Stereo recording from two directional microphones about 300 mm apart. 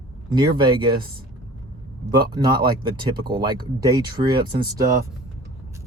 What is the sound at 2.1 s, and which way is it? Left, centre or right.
Speech, centre.